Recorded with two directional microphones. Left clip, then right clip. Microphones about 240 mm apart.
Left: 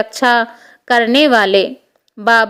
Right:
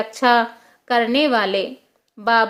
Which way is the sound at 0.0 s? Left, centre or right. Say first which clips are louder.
Left 3 dB; left.